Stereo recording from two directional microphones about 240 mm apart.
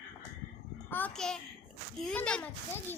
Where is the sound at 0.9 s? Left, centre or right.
Centre.